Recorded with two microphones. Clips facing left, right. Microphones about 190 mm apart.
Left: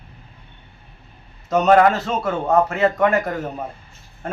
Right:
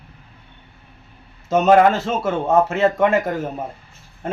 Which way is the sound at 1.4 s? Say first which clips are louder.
Right 1 dB; 25° right (ahead or behind).